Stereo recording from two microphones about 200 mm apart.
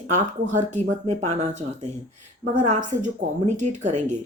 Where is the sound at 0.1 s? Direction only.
35° right (ahead or behind).